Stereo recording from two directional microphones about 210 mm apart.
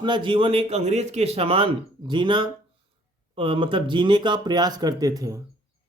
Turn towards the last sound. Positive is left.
turn(degrees=-15)  # may be behind; listen again after turning